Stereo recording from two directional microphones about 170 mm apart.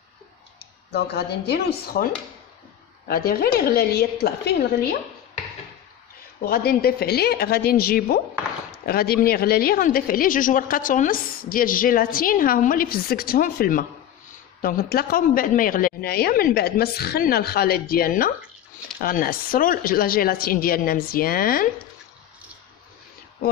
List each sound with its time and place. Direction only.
0.6 s speech: 75° left (ahead or behind)
3.1 s a woman's voice: 65° left (ahead or behind)
6.4 s a woman's voice: 60° left (ahead or behind)